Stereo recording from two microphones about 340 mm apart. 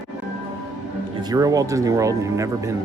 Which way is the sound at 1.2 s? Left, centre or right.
Centre.